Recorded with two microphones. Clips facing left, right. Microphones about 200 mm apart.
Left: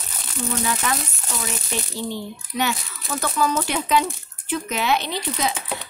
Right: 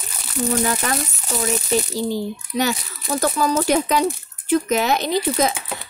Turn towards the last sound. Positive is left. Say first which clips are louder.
# even
turn(degrees=-5)  # may be behind; listen again after turning